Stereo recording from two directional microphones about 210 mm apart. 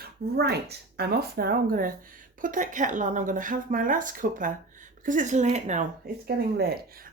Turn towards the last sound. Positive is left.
turn(degrees=-50)  # may be behind; listen again after turning